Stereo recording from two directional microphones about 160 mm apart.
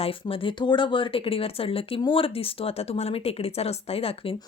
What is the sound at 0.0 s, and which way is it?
Speech, 35° left (ahead or behind).